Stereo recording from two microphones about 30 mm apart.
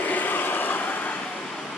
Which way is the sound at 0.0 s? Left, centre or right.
Left.